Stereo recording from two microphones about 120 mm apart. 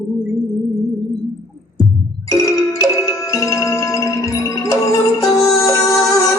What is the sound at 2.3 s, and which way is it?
Music, 25° left (ahead or behind).